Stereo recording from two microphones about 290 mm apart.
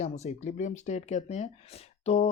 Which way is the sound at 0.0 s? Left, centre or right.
Left.